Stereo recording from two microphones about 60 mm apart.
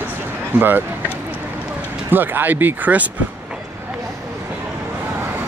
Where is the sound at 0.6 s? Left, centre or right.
Right.